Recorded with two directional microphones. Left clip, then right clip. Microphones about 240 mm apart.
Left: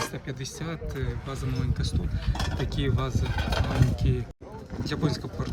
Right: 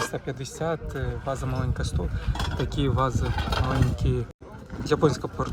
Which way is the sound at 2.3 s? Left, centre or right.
Left.